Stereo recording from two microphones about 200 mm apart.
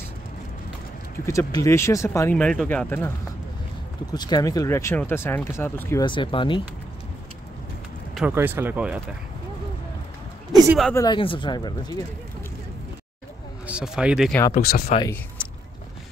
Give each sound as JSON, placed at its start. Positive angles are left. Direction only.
{"t": 1.2, "sound": "speech", "side_deg": 15}
{"t": 4.1, "sound": "speech", "side_deg": 20}
{"t": 6.0, "sound": "speech", "side_deg": 25}
{"t": 8.3, "sound": "speech", "side_deg": -10}
{"t": 10.7, "sound": "speech", "side_deg": 0}
{"t": 11.0, "sound": "speech", "side_deg": 25}
{"t": 13.7, "sound": "speech", "side_deg": -5}
{"t": 14.6, "sound": "speech", "side_deg": 50}